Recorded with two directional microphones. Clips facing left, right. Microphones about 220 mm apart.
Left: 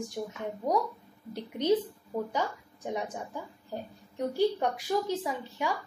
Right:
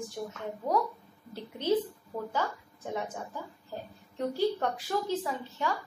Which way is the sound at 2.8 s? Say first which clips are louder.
Left 1 dB; 15° left (ahead or behind).